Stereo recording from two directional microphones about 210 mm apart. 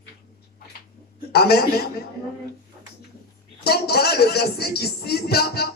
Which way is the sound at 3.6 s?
50° left (ahead or behind).